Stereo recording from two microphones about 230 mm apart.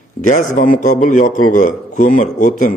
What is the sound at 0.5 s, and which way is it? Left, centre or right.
A man's voice, left.